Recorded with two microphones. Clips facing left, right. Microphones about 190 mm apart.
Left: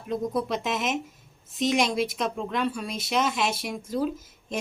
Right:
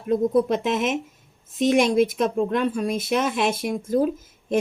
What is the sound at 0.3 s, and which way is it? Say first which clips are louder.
A woman's voice: right 7 dB; 50° right (ahead or behind).